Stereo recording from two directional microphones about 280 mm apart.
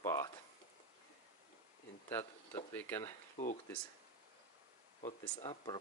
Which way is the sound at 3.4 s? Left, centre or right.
Left.